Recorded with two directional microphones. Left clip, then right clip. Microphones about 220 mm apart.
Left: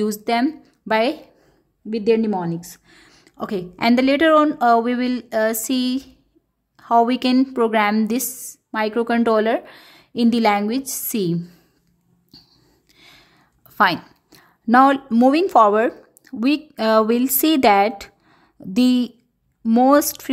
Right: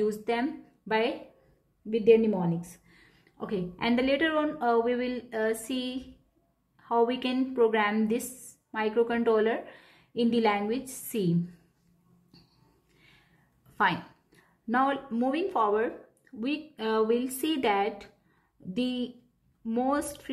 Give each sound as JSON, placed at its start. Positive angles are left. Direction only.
{"t": 0.0, "sound": "a woman's voice", "side_deg": 50}
{"t": 13.7, "sound": "a woman's voice", "side_deg": 50}